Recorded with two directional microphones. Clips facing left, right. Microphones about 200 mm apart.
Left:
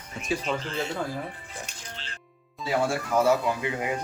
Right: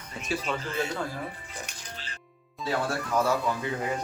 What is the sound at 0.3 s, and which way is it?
Speech, 20° left (ahead or behind).